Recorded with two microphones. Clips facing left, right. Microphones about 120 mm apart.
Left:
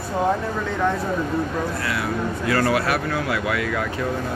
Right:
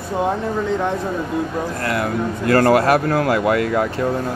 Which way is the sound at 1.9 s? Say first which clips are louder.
Right 4 dB; 50° right (ahead or behind).